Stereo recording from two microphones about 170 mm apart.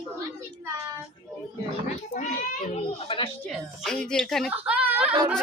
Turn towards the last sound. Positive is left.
turn(degrees=-10)  # may be behind; listen again after turning